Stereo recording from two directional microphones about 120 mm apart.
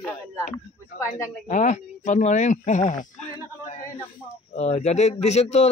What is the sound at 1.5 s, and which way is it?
Speech, 90° left.